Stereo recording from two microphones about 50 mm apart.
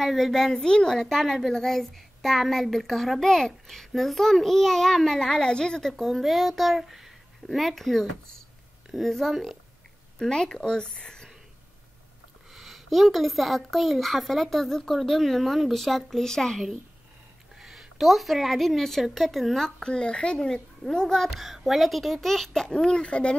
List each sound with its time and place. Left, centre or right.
0.0 s a child's voice: centre
10.1 s a woman's voice: centre
12.5 s a child's voice: centre
17.6 s a child's voice: centre
19.8 s a woman's voice: centre